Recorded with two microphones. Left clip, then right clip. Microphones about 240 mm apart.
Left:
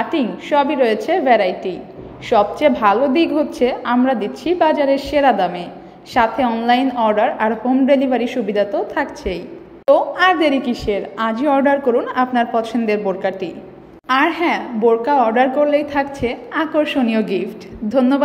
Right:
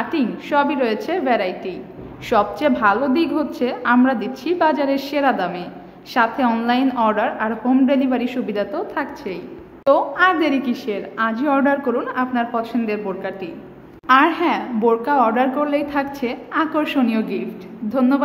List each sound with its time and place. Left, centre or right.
0.1 s a woman's voice: centre
17.1 s a woman's voice: centre